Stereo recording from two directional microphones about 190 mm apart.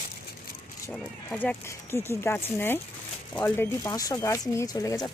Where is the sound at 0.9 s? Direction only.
5° left (ahead or behind).